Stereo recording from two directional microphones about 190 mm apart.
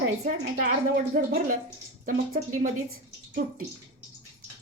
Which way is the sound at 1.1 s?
45° right (ahead or behind).